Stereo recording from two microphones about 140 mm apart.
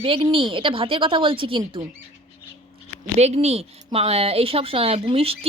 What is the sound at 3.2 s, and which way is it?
Speech, 50° right (ahead or behind).